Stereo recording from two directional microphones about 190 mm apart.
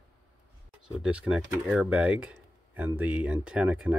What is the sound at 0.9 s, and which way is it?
Speech, 5° right (ahead or behind).